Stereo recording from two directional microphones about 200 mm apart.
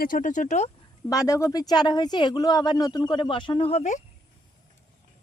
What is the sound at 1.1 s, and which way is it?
Speech, 15° left (ahead or behind).